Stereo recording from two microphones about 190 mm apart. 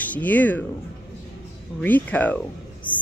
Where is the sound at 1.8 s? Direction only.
10° left (ahead or behind).